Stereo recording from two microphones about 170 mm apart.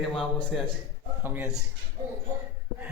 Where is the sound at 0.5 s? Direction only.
Centre (ahead or behind).